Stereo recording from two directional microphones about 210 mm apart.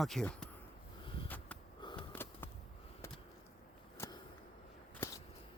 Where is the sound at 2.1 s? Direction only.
10° left (ahead or behind).